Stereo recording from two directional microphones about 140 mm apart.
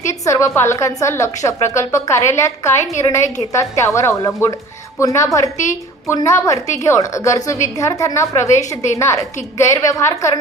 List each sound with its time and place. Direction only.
0.1 s a woman's voice: 20° left (ahead or behind)